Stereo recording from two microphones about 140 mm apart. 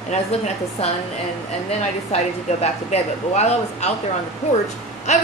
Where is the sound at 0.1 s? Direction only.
45° left (ahead or behind).